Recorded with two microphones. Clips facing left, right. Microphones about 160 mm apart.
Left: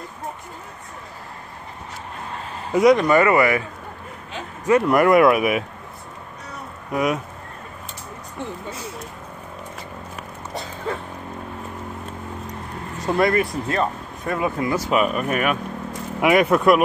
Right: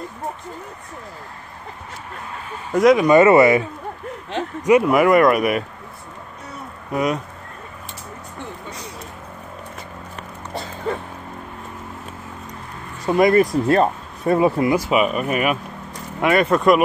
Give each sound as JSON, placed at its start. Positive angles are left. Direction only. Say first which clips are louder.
{"t": 2.7, "sound": "speech", "louder": "right 1 dB", "side_deg": 0}
{"t": 3.0, "sound": "speech", "louder": "right 5 dB", "side_deg": -20}
{"t": 4.6, "sound": "speech", "louder": "right 2 dB", "side_deg": -5}
{"t": 6.9, "sound": "speech", "louder": "right 1 dB", "side_deg": 0}
{"t": 13.3, "sound": "speech", "louder": "right 7 dB", "side_deg": -40}
{"t": 14.7, "sound": "speech", "louder": "right 2 dB", "side_deg": -10}
{"t": 16.2, "sound": "speech", "louder": "even", "side_deg": 10}